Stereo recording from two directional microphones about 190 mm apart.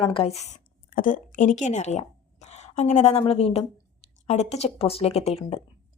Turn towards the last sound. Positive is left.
turn(degrees=35)  # may be behind; listen again after turning